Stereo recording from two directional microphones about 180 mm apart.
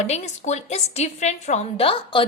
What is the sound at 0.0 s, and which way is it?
A woman's voice, 40° left (ahead or behind).